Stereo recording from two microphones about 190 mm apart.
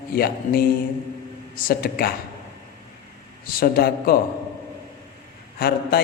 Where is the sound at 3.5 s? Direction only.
50° left (ahead or behind).